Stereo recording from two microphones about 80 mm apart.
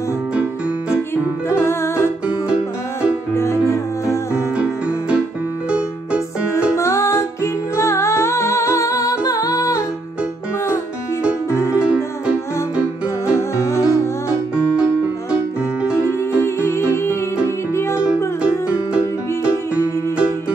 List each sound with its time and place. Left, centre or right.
0.4 s music: centre
1.5 s music: left
2.2 s music: centre
3.3 s music: left
4.6 s music: centre
6.7 s music: left
11.5 s music: left
11.8 s music: centre
13.3 s music: left
15.3 s music: centre
16.0 s music: left